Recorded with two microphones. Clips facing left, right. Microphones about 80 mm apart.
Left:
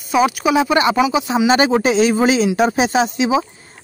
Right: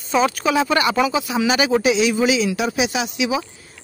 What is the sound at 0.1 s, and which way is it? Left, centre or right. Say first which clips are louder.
Speech: left 3 dB; centre.